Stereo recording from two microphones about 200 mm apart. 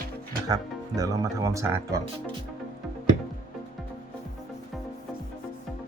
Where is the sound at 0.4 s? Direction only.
15° right (ahead or behind).